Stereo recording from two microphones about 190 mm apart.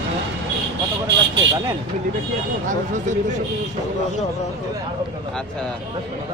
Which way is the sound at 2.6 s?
40° right (ahead or behind).